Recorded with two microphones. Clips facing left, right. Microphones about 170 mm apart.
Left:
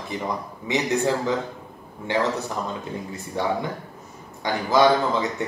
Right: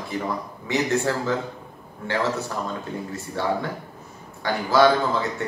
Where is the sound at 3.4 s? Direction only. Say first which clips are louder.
Left 1 dB; 15° left (ahead or behind).